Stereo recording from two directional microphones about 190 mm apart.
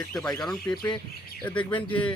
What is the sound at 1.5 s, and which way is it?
Speech, 25° left (ahead or behind).